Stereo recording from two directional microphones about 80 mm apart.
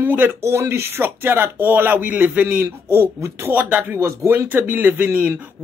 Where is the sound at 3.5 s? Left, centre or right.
Centre.